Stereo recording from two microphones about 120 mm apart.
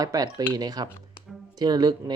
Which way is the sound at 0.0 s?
30° right (ahead or behind).